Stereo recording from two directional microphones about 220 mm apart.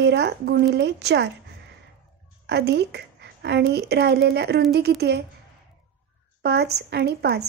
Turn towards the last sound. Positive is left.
turn(degrees=-45)  # may be behind; listen again after turning